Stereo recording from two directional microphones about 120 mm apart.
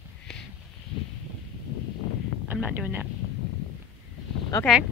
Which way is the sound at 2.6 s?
10° right (ahead or behind).